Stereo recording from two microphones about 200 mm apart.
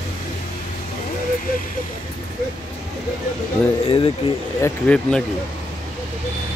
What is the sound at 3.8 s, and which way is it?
Speech, 25° left (ahead or behind).